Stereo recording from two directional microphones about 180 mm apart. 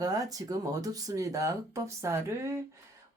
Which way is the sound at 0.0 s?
20° right (ahead or behind).